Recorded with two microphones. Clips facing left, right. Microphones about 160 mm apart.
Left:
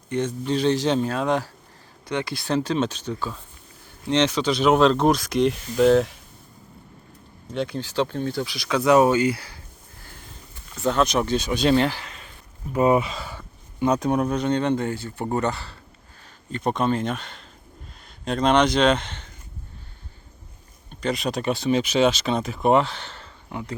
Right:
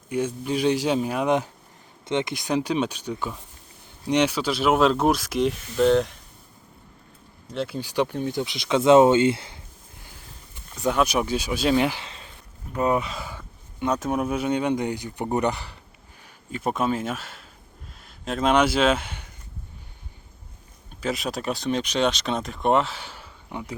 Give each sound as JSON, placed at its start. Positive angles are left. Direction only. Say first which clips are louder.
{"t": 0.1, "sound": "speech", "louder": "left 1 dB", "side_deg": -10}
{"t": 7.5, "sound": "speech", "louder": "left 2 dB", "side_deg": 0}
{"t": 7.8, "sound": "speech", "louder": "right 2 dB", "side_deg": -15}
{"t": 10.1, "sound": "a sound", "louder": "left 5 dB", "side_deg": -10}
{"t": 11.9, "sound": "a sound", "louder": "even", "side_deg": -25}
{"t": 12.7, "sound": "speech", "louder": "left 4 dB", "side_deg": 10}
{"t": 16.5, "sound": "speech", "louder": "left 2 dB", "side_deg": -5}
{"t": 20.9, "sound": "speech", "louder": "left 2 dB", "side_deg": 0}